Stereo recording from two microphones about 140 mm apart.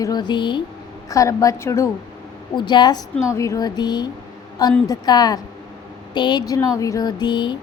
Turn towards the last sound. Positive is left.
turn(degrees=35)  # may be behind; listen again after turning